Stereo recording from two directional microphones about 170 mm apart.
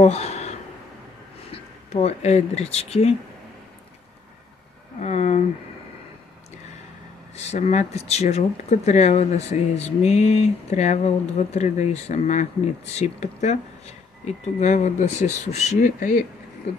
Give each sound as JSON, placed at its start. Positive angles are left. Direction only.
{"t": 0.0, "sound": "a sound", "side_deg": 40}
{"t": 1.5, "sound": "speech", "side_deg": 35}
{"t": 5.0, "sound": "speech", "side_deg": 40}
{"t": 7.3, "sound": "speech", "side_deg": 40}